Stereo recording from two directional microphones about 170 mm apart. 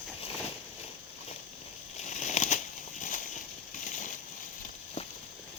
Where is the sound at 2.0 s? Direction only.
45° left (ahead or behind).